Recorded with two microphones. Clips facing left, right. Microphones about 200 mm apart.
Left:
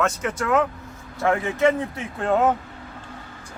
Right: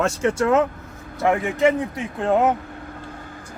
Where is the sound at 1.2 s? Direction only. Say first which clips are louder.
Right 1 dB; 15° right (ahead or behind).